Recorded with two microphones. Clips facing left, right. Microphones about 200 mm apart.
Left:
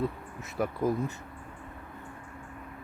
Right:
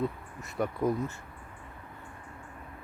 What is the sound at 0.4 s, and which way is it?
Speech, centre (ahead or behind).